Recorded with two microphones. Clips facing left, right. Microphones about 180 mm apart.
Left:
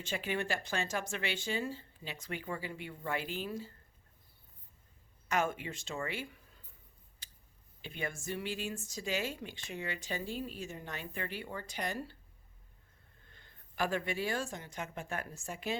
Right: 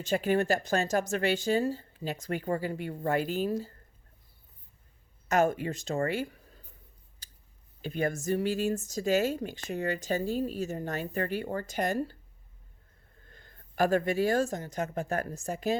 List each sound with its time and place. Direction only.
0.0 s speech: 40° right (ahead or behind)
5.3 s speech: 40° right (ahead or behind)
7.2 s a sound: 40° right (ahead or behind)
7.8 s speech: 40° right (ahead or behind)
13.3 s speech: 45° right (ahead or behind)